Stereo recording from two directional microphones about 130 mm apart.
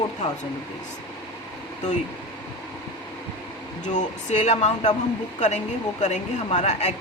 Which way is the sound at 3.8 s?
70° left (ahead or behind).